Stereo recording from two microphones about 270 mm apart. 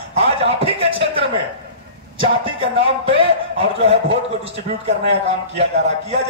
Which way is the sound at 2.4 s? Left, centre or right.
Centre.